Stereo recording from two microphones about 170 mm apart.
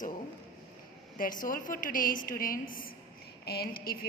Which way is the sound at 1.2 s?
55° left (ahead or behind).